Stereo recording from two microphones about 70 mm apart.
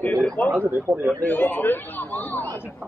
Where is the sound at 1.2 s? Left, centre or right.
Left.